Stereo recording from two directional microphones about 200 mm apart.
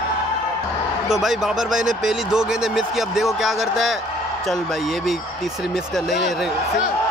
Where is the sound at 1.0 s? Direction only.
Centre (ahead or behind).